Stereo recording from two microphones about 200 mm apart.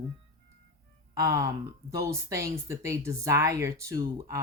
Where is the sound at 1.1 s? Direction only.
15° right (ahead or behind).